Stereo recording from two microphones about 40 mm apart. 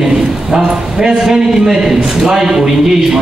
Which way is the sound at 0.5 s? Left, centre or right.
Centre.